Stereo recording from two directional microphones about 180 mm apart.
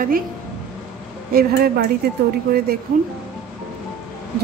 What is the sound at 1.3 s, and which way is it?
Speech, 55° right (ahead or behind).